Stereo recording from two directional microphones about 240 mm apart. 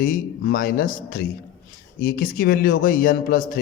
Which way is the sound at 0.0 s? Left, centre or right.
Left.